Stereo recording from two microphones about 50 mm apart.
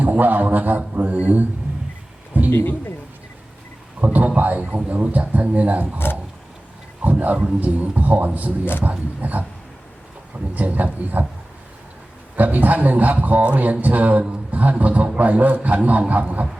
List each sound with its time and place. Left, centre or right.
0.0 s a man's voice: right
2.5 s a man's voice: left
4.0 s a man's voice: right
7.0 s a man's voice: right
12.4 s a man's voice: right